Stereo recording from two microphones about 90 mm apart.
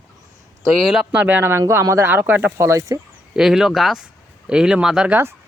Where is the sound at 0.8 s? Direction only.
5° right (ahead or behind).